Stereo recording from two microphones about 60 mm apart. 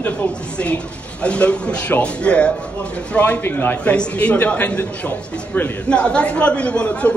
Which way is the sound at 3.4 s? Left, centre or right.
Left.